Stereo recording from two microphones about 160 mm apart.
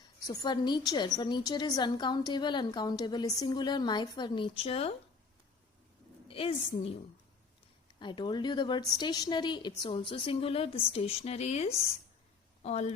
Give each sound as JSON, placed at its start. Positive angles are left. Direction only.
{"t": 0.0, "sound": "a woman's voice", "side_deg": 20}
{"t": 6.2, "sound": "a sound", "side_deg": 35}
{"t": 7.9, "sound": "a woman's voice", "side_deg": 30}